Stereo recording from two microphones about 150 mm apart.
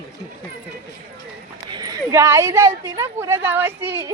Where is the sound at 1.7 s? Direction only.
20° right (ahead or behind).